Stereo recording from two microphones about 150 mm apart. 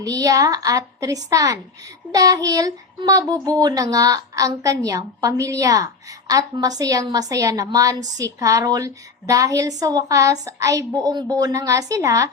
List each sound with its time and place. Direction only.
0.0 s speech: 25° right (ahead or behind)